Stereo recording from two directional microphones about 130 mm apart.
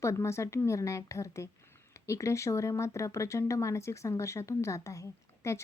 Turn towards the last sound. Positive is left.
turn(degrees=25)  # may be behind; listen again after turning